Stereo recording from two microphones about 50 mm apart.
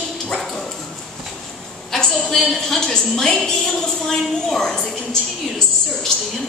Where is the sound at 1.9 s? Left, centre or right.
Centre.